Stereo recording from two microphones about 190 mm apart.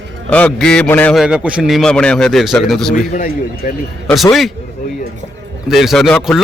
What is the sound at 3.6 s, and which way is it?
Speech, 45° left (ahead or behind).